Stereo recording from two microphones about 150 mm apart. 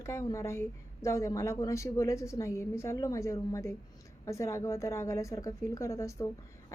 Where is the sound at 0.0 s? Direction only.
20° left (ahead or behind).